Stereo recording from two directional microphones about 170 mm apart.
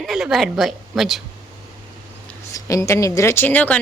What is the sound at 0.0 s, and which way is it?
A woman's voice, centre (ahead or behind).